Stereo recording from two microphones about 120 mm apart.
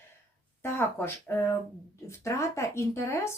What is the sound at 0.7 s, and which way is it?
Speech, 20° left (ahead or behind).